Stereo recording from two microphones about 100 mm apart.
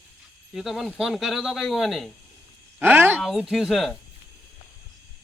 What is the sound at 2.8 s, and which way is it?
Speech, 20° right (ahead or behind).